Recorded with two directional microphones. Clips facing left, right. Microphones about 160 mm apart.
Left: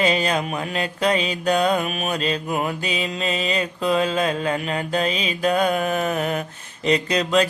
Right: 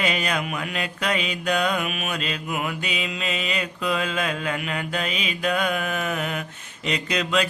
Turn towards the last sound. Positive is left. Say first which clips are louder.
# left 4 dB
turn(degrees=35)  # may be behind; listen again after turning